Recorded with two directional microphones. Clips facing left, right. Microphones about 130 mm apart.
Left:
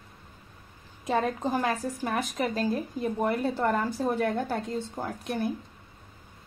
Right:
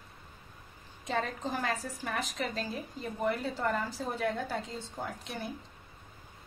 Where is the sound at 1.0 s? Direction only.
55° left (ahead or behind).